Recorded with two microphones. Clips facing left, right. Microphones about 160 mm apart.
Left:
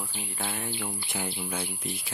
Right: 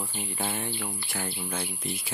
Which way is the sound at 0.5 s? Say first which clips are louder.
Right 1 dB; 5° left (ahead or behind).